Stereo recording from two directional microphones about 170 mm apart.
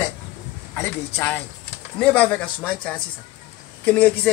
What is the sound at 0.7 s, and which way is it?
Speech, 10° left (ahead or behind).